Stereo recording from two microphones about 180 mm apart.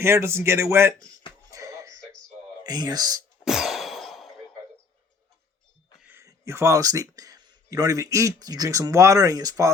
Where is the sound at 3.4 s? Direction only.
Centre (ahead or behind).